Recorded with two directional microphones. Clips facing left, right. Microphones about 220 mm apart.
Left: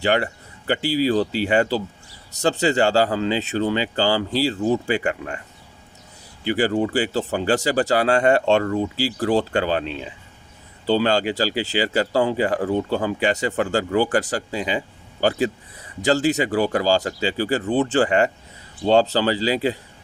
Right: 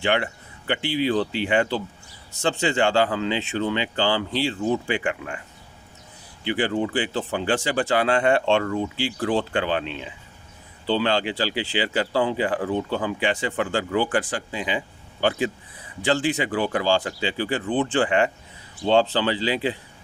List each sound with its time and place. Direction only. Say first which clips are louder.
0.0 s speech: left 3 dB; 40° left (ahead or behind)
6.4 s speech: left 3 dB; 40° left (ahead or behind)